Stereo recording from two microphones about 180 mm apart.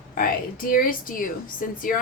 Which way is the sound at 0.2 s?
50° left (ahead or behind).